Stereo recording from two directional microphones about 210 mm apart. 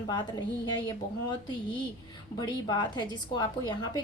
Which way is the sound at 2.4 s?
20° left (ahead or behind).